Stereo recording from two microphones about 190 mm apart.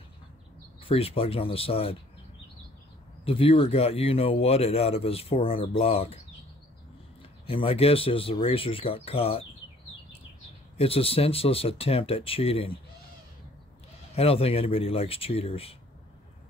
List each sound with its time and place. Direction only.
0.8 s speech: 30° left (ahead or behind)
3.3 s speech: 30° left (ahead or behind)
7.4 s speech: 30° left (ahead or behind)
10.8 s speech: 30° left (ahead or behind)
14.1 s speech: 30° left (ahead or behind)